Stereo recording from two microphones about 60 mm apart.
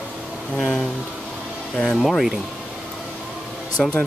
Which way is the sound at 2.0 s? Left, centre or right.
Centre.